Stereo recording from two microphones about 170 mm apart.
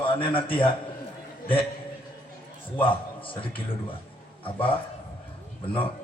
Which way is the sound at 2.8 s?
30° left (ahead or behind).